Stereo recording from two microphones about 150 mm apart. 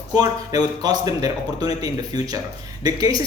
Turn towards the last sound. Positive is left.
turn(degrees=-25)  # may be behind; listen again after turning